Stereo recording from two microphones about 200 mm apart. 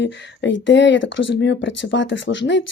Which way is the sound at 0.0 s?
65° left (ahead or behind).